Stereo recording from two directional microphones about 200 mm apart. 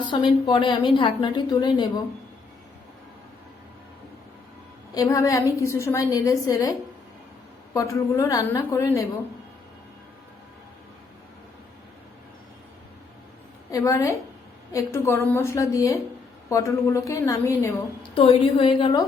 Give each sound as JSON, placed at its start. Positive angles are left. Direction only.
{"t": 0.1, "sound": "a woman's voice", "side_deg": 25}
{"t": 4.9, "sound": "a woman's voice", "side_deg": 15}
{"t": 13.7, "sound": "a woman's voice", "side_deg": 15}
{"t": 18.1, "sound": "a woman's voice", "side_deg": 30}